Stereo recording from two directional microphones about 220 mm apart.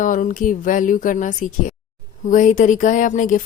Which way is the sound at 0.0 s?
35° left (ahead or behind).